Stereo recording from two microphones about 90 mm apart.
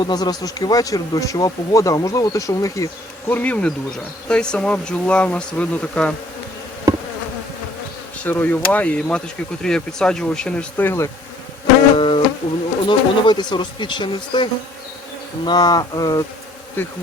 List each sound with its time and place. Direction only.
0.0 s speech: 50° left (ahead or behind)
3.2 s speech: 20° left (ahead or behind)
6.9 s bee: 45° right (ahead or behind)
8.2 s speech: 20° left (ahead or behind)
10.8 s bee: 30° left (ahead or behind)
11.9 s music: 65° left (ahead or behind)
12.9 s speech: 55° left (ahead or behind)
15.4 s speech: 50° left (ahead or behind)
16.8 s bee: 25° left (ahead or behind)